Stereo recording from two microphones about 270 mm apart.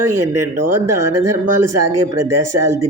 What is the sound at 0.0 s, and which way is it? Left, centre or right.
Speech, right.